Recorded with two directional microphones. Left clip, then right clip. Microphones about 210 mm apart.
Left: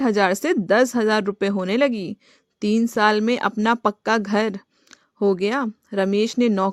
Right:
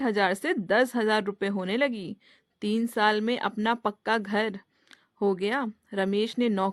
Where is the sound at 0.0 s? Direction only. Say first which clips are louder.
Left 6 dB; 35° left (ahead or behind).